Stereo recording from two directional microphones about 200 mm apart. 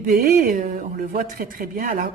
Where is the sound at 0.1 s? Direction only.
45° right (ahead or behind).